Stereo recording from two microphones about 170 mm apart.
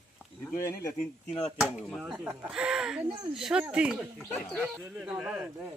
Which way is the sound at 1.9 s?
Centre (ahead or behind).